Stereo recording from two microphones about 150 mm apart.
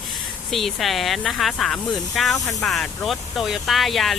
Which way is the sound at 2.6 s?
Centre (ahead or behind).